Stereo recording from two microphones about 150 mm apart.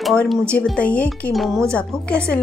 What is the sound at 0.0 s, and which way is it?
Speech, 5° left (ahead or behind).